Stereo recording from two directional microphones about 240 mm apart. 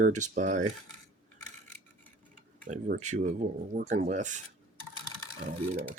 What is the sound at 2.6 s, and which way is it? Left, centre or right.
Speech, right.